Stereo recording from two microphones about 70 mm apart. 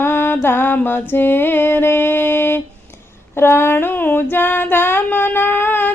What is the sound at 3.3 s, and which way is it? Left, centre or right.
Female singing, left.